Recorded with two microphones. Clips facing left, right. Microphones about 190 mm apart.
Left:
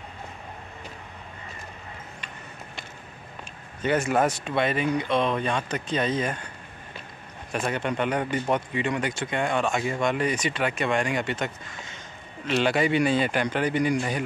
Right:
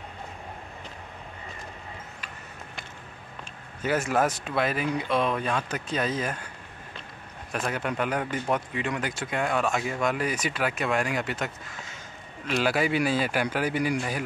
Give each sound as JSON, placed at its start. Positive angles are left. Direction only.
{"t": 3.8, "sound": "speech", "side_deg": -5}
{"t": 7.5, "sound": "speech", "side_deg": 0}